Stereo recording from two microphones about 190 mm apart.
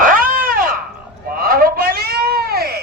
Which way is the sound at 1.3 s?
50° right (ahead or behind).